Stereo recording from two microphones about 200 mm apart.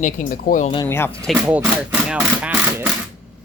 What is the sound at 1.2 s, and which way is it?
Speech, centre (ahead or behind).